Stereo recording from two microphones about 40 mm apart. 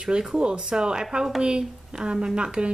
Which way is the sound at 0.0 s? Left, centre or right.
Centre.